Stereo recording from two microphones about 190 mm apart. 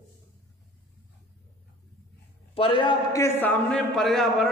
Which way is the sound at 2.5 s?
30° left (ahead or behind).